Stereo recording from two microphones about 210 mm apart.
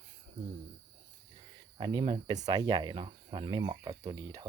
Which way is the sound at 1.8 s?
20° right (ahead or behind).